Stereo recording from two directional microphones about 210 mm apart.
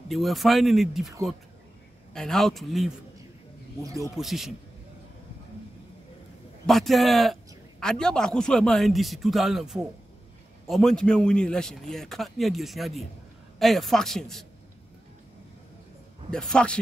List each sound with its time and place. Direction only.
0.1 s a man's voice: centre (ahead or behind)
2.1 s a man's voice: centre (ahead or behind)
3.8 s speech: 15° right (ahead or behind)
4.2 s a man's voice: centre (ahead or behind)
6.6 s a man's voice: centre (ahead or behind)
16.3 s a man's voice: 5° left (ahead or behind)